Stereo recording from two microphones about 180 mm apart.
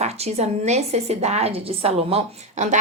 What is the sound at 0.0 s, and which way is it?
A woman's voice, 35° right (ahead or behind).